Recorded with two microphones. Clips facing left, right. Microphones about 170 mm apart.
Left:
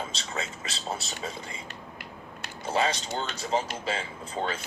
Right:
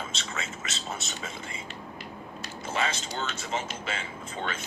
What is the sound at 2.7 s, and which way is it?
A man's voice, 30° left (ahead or behind).